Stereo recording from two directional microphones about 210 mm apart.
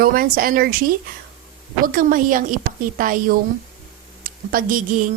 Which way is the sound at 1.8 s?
40° right (ahead or behind).